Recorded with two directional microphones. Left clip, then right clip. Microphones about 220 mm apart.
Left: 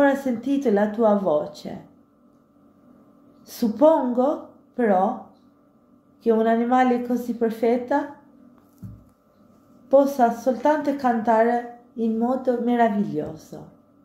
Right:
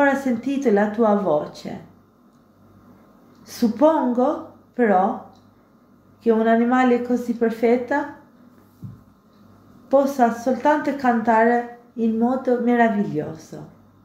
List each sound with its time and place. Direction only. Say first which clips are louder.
0.0 s a woman's voice: right 1 dB; 20° left (ahead or behind)
3.4 s a woman's voice: even; 20° left (ahead or behind)
6.2 s a woman's voice: right 2 dB; 20° left (ahead or behind)
9.8 s a woman's voice: even; 20° left (ahead or behind)